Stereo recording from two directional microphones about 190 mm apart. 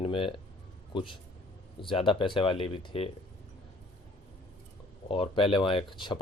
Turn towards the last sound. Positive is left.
turn(degrees=25)  # may be behind; listen again after turning